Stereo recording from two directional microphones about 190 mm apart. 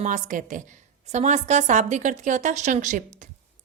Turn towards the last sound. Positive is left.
turn(degrees=-40)  # may be behind; listen again after turning